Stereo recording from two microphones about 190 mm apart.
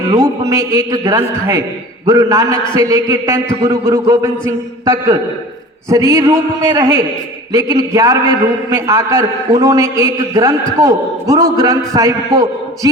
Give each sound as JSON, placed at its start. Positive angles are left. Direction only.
{"t": 0.2, "sound": "a man's voice", "side_deg": -15}